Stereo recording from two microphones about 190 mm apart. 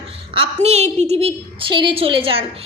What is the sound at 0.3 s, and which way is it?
A woman's voice, 35° right (ahead or behind).